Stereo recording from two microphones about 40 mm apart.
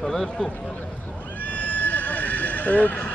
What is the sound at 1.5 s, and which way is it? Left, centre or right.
Neigh, left.